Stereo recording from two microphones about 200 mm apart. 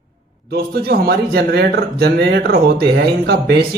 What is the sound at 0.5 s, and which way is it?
Speech, 50° right (ahead or behind).